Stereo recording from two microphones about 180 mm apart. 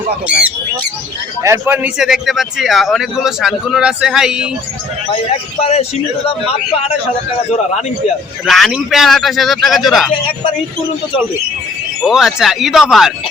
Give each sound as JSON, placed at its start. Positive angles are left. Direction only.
{"t": 0.3, "sound": "a man's voice", "side_deg": -5}
{"t": 5.1, "sound": "a man's voice", "side_deg": 35}
{"t": 8.4, "sound": "a man's voice", "side_deg": 0}
{"t": 12.0, "sound": "a man's voice", "side_deg": 0}